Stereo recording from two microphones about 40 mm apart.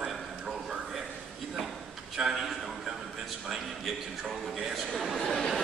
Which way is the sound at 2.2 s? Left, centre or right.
Centre.